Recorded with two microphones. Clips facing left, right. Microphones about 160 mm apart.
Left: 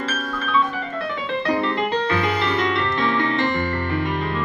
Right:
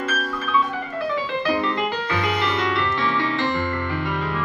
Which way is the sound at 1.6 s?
25° left (ahead or behind).